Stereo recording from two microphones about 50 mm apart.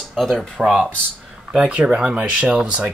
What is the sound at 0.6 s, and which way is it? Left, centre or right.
Speech, centre.